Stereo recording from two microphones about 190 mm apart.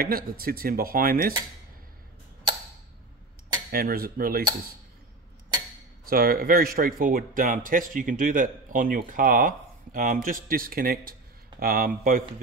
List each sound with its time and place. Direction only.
0.0 s a man's voice: 50° right (ahead or behind)
3.7 s a man's voice: 50° right (ahead or behind)
6.0 s a man's voice: 50° right (ahead or behind)